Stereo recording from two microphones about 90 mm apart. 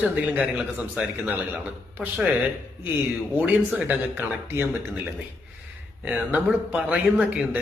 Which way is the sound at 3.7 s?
20° right (ahead or behind).